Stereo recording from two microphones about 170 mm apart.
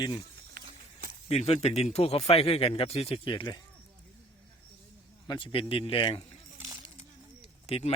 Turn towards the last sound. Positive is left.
turn(degrees=40)  # may be behind; listen again after turning